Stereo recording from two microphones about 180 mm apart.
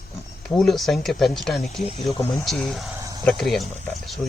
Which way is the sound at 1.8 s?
35° left (ahead or behind).